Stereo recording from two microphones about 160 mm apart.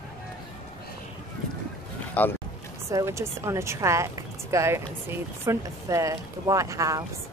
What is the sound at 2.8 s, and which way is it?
Speech, 20° right (ahead or behind).